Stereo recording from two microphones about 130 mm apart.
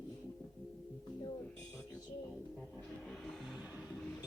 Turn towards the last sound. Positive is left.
turn(degrees=-10)  # may be behind; listen again after turning